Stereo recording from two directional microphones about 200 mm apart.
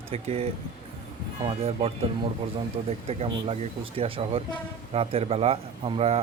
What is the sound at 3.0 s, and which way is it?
Speech, 30° right (ahead or behind).